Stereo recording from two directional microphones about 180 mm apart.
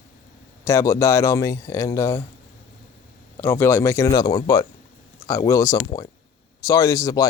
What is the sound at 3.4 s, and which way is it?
Speech, 10° left (ahead or behind).